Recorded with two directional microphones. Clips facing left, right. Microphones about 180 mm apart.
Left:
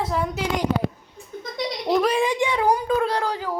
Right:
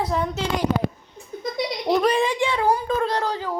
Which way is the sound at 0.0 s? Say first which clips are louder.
Right 1 dB; centre (ahead or behind).